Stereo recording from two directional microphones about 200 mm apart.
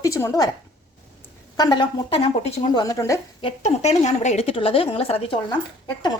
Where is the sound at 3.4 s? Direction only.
35° left (ahead or behind).